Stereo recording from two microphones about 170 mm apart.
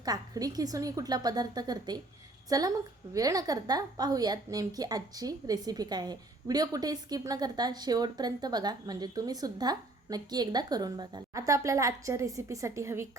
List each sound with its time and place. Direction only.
0.0 s a woman's voice: 20° right (ahead or behind)